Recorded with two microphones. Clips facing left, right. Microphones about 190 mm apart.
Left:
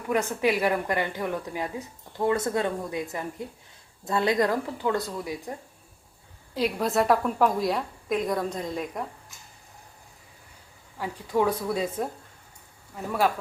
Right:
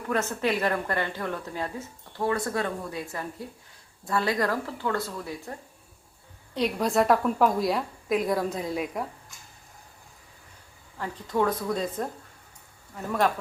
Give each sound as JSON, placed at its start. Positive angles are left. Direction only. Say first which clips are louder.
{"t": 0.1, "sound": "speech", "louder": "left 2 dB", "side_deg": 15}
{"t": 6.5, "sound": "a woman's voice", "louder": "even", "side_deg": 5}
{"t": 10.9, "sound": "a woman's voice", "louder": "left 2 dB", "side_deg": 10}